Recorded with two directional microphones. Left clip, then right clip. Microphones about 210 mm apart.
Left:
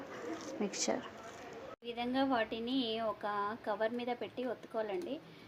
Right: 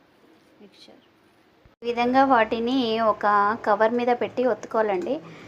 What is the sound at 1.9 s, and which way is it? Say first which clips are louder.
Speech: right 16 dB; 10° right (ahead or behind).